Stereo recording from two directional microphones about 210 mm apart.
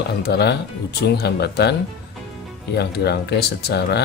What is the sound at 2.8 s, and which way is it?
Speech, 50° left (ahead or behind).